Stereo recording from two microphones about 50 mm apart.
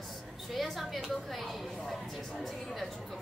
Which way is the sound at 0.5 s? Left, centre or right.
Centre.